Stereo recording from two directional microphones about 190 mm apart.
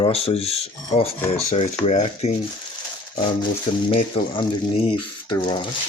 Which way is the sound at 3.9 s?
30° left (ahead or behind).